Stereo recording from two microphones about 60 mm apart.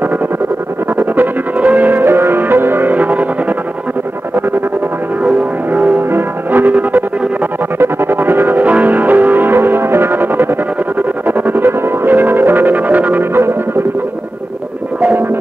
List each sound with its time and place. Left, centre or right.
0.9 s music: right
5.7 s music: right